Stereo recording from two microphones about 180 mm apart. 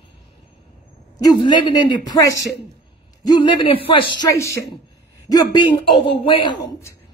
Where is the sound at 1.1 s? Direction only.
25° left (ahead or behind).